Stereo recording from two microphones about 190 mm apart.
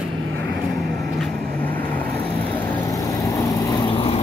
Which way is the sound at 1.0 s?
Centre (ahead or behind).